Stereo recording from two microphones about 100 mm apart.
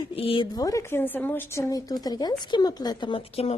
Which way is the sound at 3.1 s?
80° left.